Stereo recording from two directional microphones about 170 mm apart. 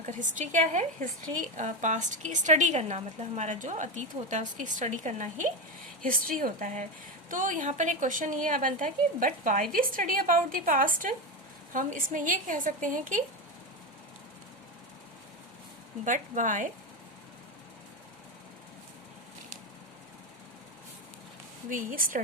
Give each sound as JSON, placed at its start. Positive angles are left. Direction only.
{"t": 0.0, "sound": "a woman's voice", "side_deg": -50}
{"t": 16.0, "sound": "a woman's voice", "side_deg": -50}
{"t": 21.7, "sound": "a woman's voice", "side_deg": -50}